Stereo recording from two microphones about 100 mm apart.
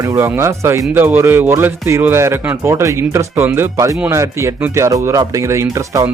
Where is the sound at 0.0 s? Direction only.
35° right (ahead or behind).